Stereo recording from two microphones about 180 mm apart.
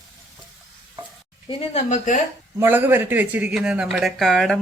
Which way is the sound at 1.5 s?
35° left (ahead or behind).